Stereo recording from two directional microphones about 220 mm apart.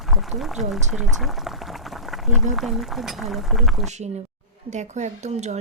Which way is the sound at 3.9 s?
30° right (ahead or behind).